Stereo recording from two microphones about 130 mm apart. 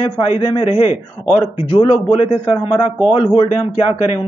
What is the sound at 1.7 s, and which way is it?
A man's voice, 45° left (ahead or behind).